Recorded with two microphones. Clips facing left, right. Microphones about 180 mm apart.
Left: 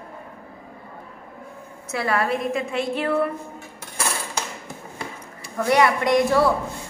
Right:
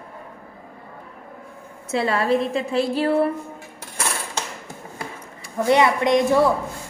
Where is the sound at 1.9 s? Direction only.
25° right (ahead or behind).